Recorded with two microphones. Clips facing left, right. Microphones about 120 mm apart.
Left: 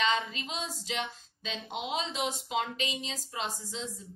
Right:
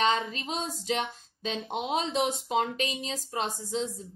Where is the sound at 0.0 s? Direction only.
45° right (ahead or behind).